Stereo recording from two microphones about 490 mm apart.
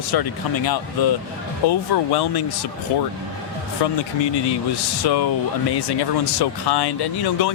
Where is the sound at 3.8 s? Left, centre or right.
Left.